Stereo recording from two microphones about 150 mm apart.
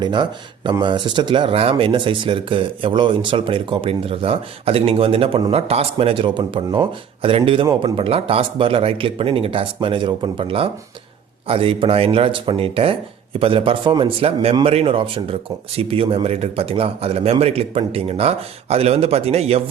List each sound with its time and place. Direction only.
0.0 s speech: 30° right (ahead or behind)